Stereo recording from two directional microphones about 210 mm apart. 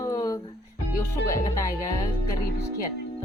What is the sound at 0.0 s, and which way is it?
Music, 15° left (ahead or behind).